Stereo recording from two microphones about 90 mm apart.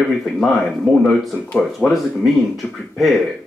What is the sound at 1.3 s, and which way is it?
Speech, 20° left (ahead or behind).